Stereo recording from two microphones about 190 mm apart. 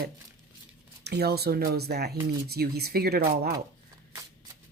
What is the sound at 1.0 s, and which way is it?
Speech, 60° right (ahead or behind).